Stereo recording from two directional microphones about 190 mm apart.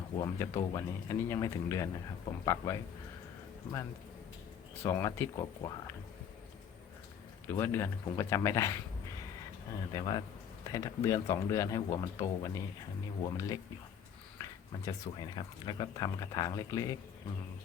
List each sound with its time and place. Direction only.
0.2 s speech: 15° left (ahead or behind)
4.8 s speech: 15° left (ahead or behind)
7.5 s speech: 15° left (ahead or behind)
9.9 s speech: 20° left (ahead or behind)
14.8 s speech: 20° left (ahead or behind)